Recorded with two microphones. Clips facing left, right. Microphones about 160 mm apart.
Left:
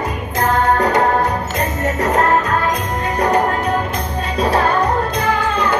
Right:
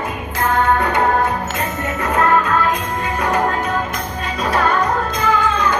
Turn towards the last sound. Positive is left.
turn(degrees=35)  # may be behind; listen again after turning